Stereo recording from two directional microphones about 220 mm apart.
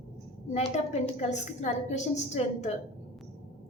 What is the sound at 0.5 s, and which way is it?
A woman's voice, 30° left (ahead or behind).